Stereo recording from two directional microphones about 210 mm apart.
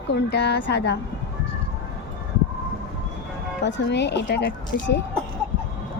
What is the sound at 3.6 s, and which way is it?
Speech, 60° left (ahead or behind).